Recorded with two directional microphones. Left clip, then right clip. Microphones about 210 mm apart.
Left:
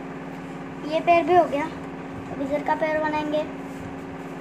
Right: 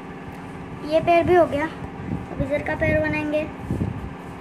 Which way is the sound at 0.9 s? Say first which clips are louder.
Right 2 dB; 20° right (ahead or behind).